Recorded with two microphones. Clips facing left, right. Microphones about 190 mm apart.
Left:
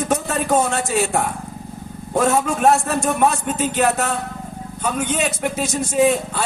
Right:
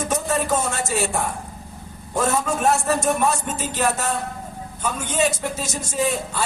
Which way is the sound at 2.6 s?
60° left (ahead or behind).